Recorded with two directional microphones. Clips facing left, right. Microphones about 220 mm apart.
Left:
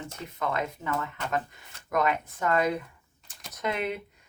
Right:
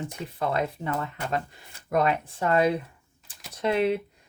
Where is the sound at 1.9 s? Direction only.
30° right (ahead or behind).